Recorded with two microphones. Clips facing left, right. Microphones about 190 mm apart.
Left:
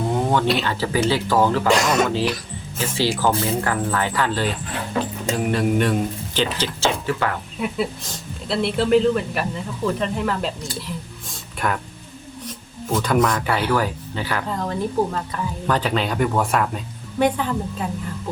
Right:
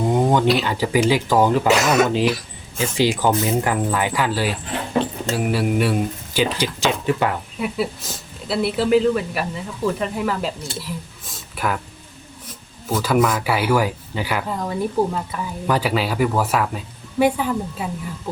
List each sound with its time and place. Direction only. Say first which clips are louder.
0.1 s a sound: right 3 dB; 15° right (ahead or behind)
0.6 s speech: right 2 dB; 15° right (ahead or behind)
1.6 s speech: right 2 dB; 5° right (ahead or behind)
2.0 s speech: right 3 dB; 15° right (ahead or behind)
7.6 s speech: even; 5° right (ahead or behind)
10.8 s a sound: even; 5° right (ahead or behind)
12.9 s speech: right 1 dB; 5° right (ahead or behind)